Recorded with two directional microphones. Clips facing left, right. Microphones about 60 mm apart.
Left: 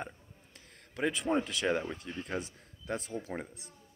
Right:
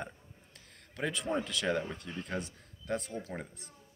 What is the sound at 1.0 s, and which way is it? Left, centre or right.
Speech, centre.